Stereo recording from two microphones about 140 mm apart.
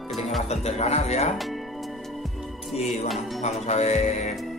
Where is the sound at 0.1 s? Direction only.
Centre (ahead or behind).